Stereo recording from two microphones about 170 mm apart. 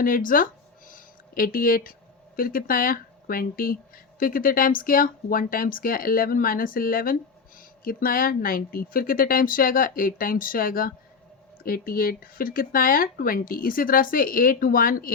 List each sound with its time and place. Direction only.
0.0 s speech: 55° left (ahead or behind)